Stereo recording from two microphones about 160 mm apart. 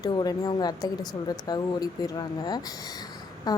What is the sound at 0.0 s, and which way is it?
A woman's voice, 25° left (ahead or behind).